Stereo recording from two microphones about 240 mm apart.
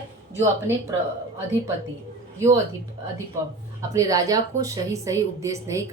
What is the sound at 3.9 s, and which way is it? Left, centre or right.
A woman's voice, centre.